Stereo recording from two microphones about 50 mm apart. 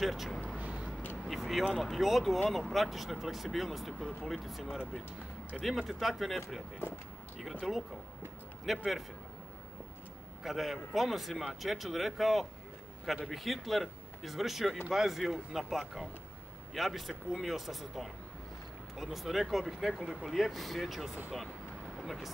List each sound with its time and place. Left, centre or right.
0.0 s speech: centre
0.6 s a sound: right
1.2 s speech: centre
7.6 s speech: centre
10.4 s speech: centre